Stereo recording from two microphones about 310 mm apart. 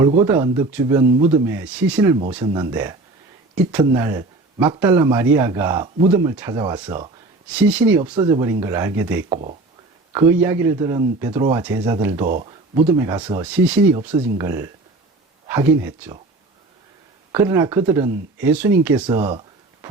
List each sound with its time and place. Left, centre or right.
0.0 s speech: centre
9.3 s speech: right
10.1 s speech: centre
12.2 s speech: right
17.3 s speech: centre